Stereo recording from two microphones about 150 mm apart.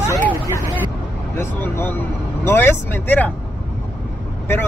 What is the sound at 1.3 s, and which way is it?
Speech, 15° left (ahead or behind).